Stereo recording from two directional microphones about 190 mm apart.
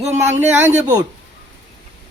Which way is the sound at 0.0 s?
10° right (ahead or behind).